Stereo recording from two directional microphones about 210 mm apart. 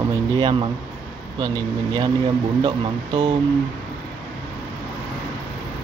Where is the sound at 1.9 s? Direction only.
25° right (ahead or behind).